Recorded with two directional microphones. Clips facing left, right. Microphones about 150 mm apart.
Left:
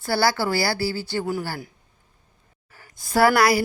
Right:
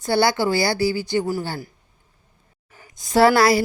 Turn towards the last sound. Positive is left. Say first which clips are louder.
# right 3 dB
turn(degrees=-25)  # may be behind; listen again after turning